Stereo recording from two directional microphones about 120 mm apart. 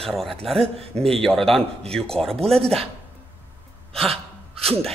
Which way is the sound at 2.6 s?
55° right (ahead or behind).